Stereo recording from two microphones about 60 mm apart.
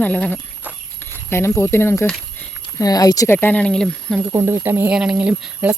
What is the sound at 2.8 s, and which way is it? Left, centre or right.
Speech, left.